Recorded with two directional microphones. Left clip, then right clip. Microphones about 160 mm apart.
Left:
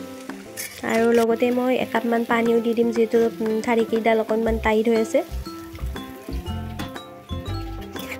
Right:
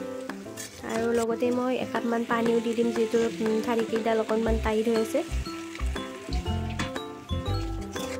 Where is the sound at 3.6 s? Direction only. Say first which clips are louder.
Left 6 dB; 10° left (ahead or behind).